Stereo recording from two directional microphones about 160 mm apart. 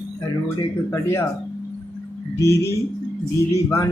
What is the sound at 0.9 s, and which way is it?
Speech, 15° left (ahead or behind).